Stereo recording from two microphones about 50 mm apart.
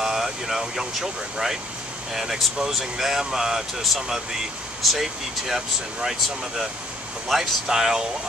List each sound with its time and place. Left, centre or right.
0.0 s speech: centre